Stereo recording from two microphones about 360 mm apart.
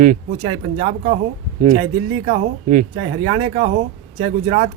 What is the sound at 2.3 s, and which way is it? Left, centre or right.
Speech, right.